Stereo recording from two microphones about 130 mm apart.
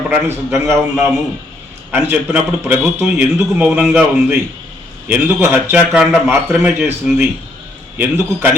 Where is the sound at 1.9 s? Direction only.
15° right (ahead or behind).